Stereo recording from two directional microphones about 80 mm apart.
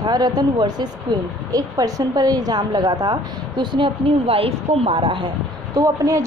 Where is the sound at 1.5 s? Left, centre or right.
Right.